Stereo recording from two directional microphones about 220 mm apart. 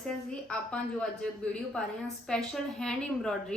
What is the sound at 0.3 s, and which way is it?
Speech, 5° left (ahead or behind).